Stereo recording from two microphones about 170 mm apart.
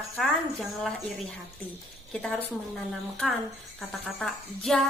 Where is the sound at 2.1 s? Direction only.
5° left (ahead or behind).